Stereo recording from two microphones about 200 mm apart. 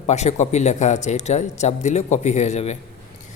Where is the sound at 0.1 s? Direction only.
35° left (ahead or behind).